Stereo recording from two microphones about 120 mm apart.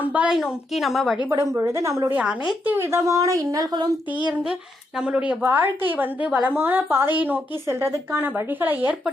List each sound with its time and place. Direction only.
0.0 s a woman's voice: 10° right (ahead or behind)
1.2 s a child's voice: 20° right (ahead or behind); by 4.3 s 40° right (ahead or behind)
4.9 s a woman's voice: 10° right (ahead or behind)